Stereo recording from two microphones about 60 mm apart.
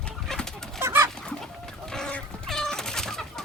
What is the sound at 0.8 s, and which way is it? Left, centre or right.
Chicken, right.